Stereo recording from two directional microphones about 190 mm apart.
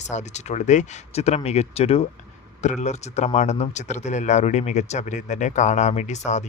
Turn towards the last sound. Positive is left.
turn(degrees=40)  # may be behind; listen again after turning